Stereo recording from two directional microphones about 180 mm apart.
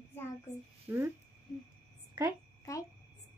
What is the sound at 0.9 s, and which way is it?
Speech, 10° right (ahead or behind).